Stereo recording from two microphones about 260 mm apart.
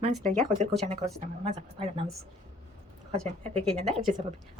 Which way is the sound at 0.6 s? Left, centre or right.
Right.